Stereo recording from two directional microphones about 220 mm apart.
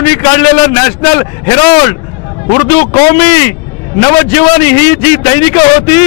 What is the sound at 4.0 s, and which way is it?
A man's voice, 15° left (ahead or behind).